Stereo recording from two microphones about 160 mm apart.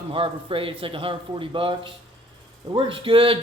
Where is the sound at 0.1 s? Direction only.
35° right (ahead or behind).